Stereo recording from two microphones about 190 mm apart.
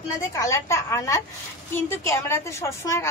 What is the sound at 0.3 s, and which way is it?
A woman's voice, 15° left (ahead or behind).